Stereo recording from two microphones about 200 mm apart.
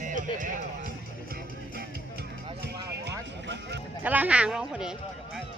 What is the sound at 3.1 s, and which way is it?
Speech, 60° right (ahead or behind).